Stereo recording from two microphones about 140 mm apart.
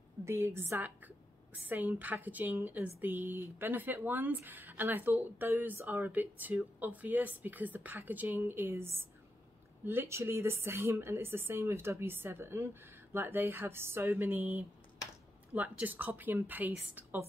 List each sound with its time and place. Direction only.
0.2 s a woman's voice: 20° right (ahead or behind)